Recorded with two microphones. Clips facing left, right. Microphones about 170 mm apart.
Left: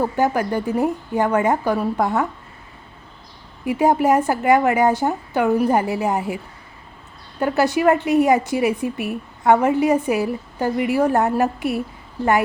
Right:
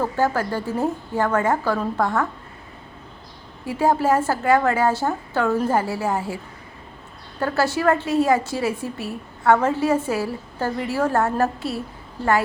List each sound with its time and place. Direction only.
0.0 s a woman's voice: 15° left (ahead or behind)
3.7 s a woman's voice: 20° left (ahead or behind)